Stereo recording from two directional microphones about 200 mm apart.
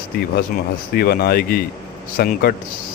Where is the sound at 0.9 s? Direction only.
50° left (ahead or behind).